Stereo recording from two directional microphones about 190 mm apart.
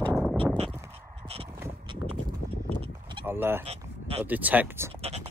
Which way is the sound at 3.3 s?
10° right (ahead or behind).